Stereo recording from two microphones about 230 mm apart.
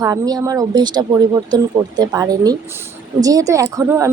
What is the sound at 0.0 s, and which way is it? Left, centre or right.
A woman's voice, centre.